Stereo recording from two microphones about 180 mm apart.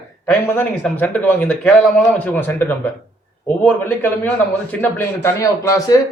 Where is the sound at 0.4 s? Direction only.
10° left (ahead or behind).